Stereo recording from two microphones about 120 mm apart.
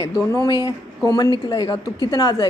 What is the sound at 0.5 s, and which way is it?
A woman's voice, 35° left (ahead or behind).